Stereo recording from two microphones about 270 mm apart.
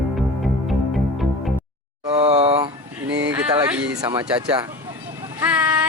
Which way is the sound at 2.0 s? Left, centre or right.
Right.